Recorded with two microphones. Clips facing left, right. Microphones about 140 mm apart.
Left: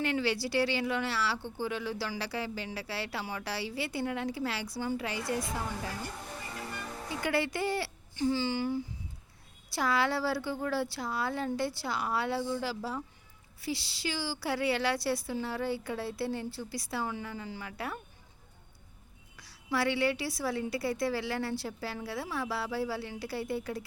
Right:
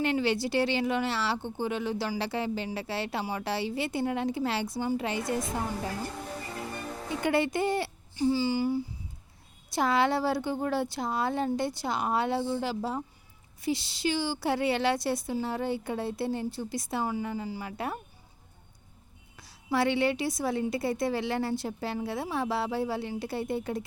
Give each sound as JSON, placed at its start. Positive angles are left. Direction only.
{"t": 0.0, "sound": "a woman's voice", "side_deg": -20}
{"t": 7.2, "sound": "a woman's voice", "side_deg": -20}
{"t": 9.6, "sound": "a woman's voice", "side_deg": -20}
{"t": 19.4, "sound": "a woman's voice", "side_deg": -25}